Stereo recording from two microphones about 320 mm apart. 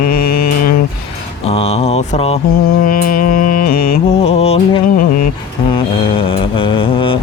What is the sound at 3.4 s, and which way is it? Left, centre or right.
Music, left.